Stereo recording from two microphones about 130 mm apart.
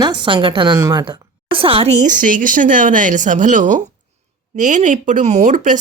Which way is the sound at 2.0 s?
90° right.